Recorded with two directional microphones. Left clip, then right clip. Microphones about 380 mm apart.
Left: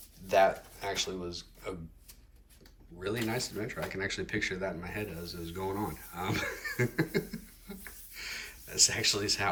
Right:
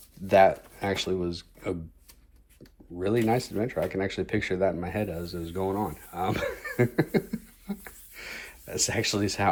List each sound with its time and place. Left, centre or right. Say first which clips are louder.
0.3 s speech: right 6 dB; centre
3.0 s speech: right 8 dB; centre